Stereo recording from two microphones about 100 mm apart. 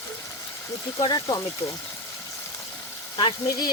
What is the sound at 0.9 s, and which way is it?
Speech, 45° left (ahead or behind).